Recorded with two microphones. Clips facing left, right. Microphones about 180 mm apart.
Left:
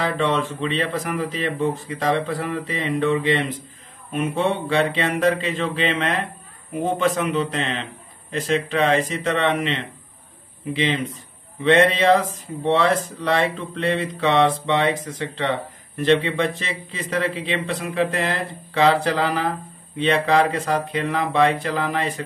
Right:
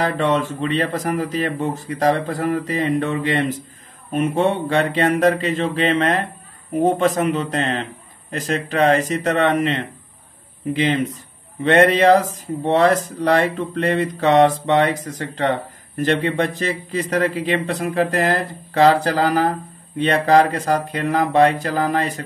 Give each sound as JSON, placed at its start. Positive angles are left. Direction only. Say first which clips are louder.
{"t": 0.0, "sound": "speech", "louder": "right 3 dB", "side_deg": -40}
{"t": 11.6, "sound": "speech", "louder": "right 3 dB", "side_deg": -45}